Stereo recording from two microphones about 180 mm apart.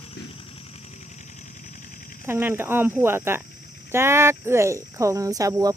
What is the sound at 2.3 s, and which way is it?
Speech, 10° right (ahead or behind).